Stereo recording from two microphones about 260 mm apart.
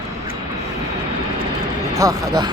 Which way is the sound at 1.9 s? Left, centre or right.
Centre.